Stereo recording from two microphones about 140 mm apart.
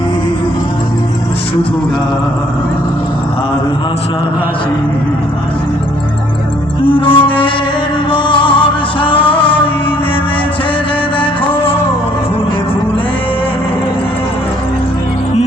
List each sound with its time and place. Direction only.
6.9 s music: 35° left (ahead or behind)
11.2 s music: 40° left (ahead or behind)